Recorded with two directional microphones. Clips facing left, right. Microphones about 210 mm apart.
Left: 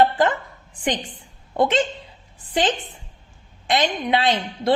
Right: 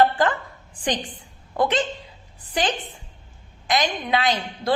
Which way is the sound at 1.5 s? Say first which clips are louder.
Left 2 dB; 25° left (ahead or behind).